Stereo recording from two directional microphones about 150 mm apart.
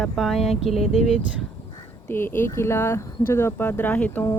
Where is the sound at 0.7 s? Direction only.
45° left (ahead or behind).